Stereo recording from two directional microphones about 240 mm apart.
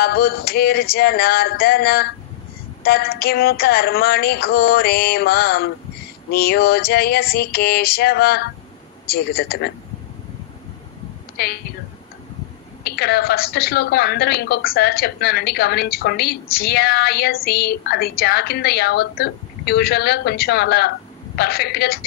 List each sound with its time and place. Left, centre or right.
0.0 s a woman's voice: left
11.3 s a woman's voice: left
12.8 s a woman's voice: left